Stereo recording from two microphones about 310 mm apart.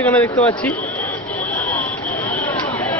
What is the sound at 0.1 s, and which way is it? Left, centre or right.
Speech, centre.